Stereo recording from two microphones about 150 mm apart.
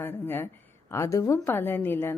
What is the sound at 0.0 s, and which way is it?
A woman's voice, 15° left (ahead or behind).